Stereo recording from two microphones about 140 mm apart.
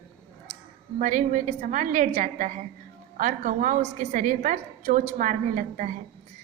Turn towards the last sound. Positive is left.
turn(degrees=-70)  # may be behind; listen again after turning